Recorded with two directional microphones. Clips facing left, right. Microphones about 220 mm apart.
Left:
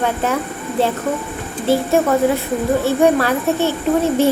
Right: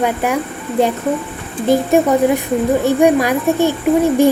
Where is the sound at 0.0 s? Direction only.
10° right (ahead or behind).